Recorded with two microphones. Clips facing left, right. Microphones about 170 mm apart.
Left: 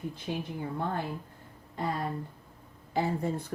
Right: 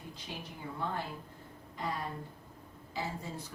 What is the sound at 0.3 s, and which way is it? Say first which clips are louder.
Speech: left 10 dB; 50° left (ahead or behind).